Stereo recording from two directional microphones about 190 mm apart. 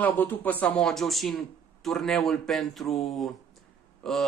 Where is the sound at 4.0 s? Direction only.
Centre (ahead or behind).